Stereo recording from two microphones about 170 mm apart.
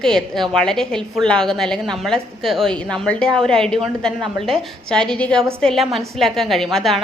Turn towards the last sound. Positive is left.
turn(degrees=0)  # may be behind; listen again after turning